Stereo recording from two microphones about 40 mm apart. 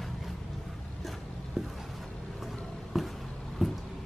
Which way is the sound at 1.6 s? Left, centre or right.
Centre.